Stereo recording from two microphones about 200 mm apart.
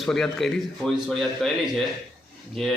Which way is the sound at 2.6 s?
Centre (ahead or behind).